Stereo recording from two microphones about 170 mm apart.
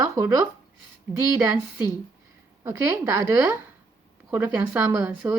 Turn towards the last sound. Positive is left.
turn(degrees=-15)  # may be behind; listen again after turning